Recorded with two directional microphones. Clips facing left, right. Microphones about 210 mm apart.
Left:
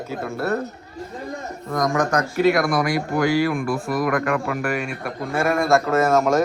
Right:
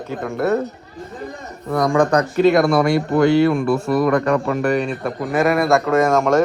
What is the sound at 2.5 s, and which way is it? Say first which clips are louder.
Speech: right 5 dB; 25° right (ahead or behind).